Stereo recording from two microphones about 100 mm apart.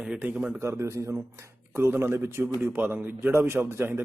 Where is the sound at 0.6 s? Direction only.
30° right (ahead or behind).